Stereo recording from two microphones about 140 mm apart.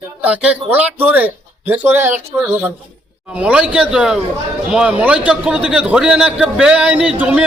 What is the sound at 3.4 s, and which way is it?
A man's voice, 5° right (ahead or behind).